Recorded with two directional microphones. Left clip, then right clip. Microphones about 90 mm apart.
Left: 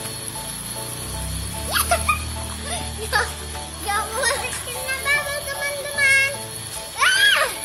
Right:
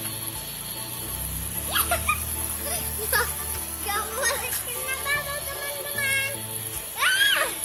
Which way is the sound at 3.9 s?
40° right (ahead or behind).